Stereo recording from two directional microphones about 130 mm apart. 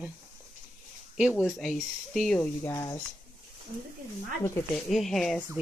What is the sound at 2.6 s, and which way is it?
Speech, 25° left (ahead or behind).